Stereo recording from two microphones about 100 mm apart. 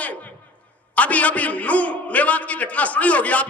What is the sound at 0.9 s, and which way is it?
A man's voice, 15° left (ahead or behind).